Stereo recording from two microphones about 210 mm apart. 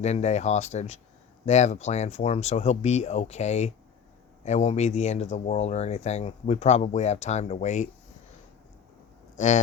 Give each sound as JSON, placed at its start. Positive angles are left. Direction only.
{"t": 0.0, "sound": "speech", "side_deg": 30}